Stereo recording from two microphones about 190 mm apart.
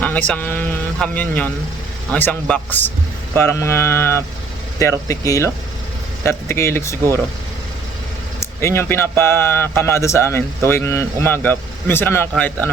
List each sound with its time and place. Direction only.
0.0 s speech: 10° left (ahead or behind)
8.4 s speech: 15° left (ahead or behind)